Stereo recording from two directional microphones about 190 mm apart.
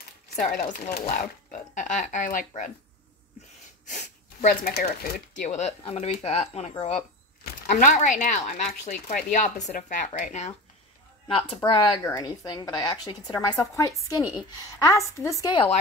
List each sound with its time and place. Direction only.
0.5 s speech: 40° left (ahead or behind)
3.8 s speech: 40° left (ahead or behind)
5.4 s speech: 35° left (ahead or behind)
11.2 s a woman's voice: 25° left (ahead or behind)